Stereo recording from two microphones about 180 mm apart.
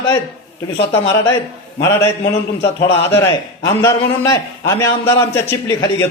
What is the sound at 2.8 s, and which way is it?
Speech, 85° left.